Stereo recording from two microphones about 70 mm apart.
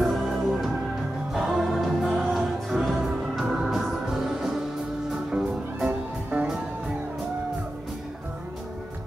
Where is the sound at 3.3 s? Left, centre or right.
Centre.